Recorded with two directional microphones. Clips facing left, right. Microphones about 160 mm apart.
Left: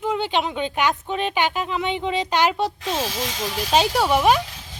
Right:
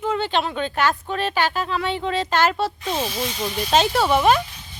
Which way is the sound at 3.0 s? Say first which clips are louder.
Right 1 dB; 90° left.